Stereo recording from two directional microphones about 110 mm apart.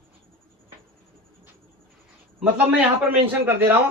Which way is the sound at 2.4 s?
15° right (ahead or behind).